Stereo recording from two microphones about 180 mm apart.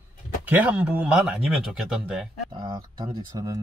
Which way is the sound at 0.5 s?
10° right (ahead or behind).